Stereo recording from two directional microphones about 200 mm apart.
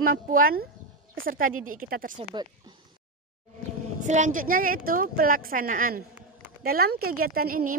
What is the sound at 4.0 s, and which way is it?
Speech, 35° right (ahead or behind).